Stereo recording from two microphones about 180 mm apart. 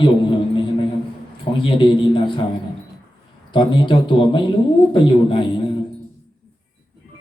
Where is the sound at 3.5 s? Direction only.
25° left (ahead or behind).